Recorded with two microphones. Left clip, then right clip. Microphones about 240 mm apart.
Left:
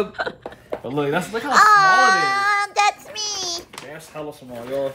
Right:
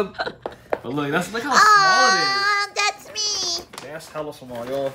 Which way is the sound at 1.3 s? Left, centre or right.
Centre.